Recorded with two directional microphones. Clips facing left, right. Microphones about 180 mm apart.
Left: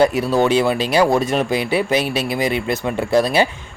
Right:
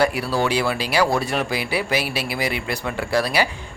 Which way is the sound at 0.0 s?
20° left (ahead or behind).